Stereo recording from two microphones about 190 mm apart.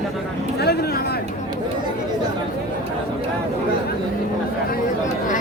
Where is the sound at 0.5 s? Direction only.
60° left (ahead or behind).